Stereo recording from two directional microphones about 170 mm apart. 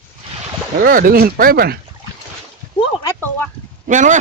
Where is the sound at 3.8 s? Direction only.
45° right (ahead or behind).